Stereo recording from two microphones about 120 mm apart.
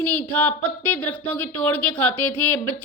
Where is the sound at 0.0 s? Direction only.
15° left (ahead or behind).